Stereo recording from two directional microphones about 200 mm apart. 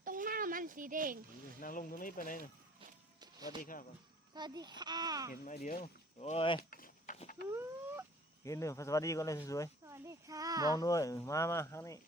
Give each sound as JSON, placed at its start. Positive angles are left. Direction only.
{"t": 0.0, "sound": "a sound", "side_deg": -45}
{"t": 1.6, "sound": "speech", "side_deg": 45}
{"t": 3.2, "sound": "music", "side_deg": -20}
{"t": 3.6, "sound": "speech", "side_deg": 45}
{"t": 4.4, "sound": "a child's voice", "side_deg": -20}
{"t": 5.3, "sound": "speech", "side_deg": 45}
{"t": 5.8, "sound": "speech", "side_deg": 30}
{"t": 6.6, "sound": "a sound", "side_deg": 45}
{"t": 7.2, "sound": "speech", "side_deg": 40}
{"t": 7.5, "sound": "a sound", "side_deg": -10}
{"t": 8.4, "sound": "speech", "side_deg": 15}
{"t": 9.8, "sound": "a child's voice", "side_deg": -15}
{"t": 10.8, "sound": "speech", "side_deg": 15}